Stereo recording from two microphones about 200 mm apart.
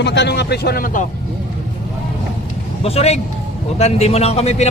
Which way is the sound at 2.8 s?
30° left (ahead or behind).